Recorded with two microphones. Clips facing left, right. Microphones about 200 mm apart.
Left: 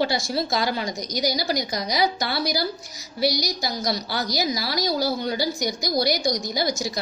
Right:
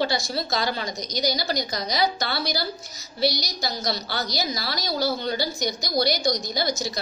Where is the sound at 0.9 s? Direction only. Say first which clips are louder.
Left 1 dB; 20° right (ahead or behind).